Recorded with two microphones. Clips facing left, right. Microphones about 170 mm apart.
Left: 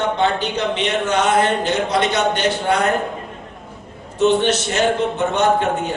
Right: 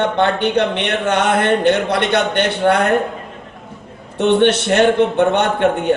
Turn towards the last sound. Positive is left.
turn(degrees=-60)  # may be behind; listen again after turning